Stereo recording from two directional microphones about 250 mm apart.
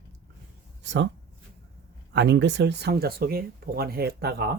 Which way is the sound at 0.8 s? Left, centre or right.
Right.